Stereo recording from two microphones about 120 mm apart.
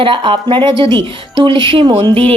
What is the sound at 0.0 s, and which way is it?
Speech, 45° right (ahead or behind).